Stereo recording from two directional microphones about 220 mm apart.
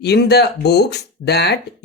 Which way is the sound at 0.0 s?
50° left (ahead or behind).